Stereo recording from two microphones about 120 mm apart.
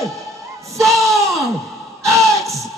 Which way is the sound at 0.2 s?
25° right (ahead or behind).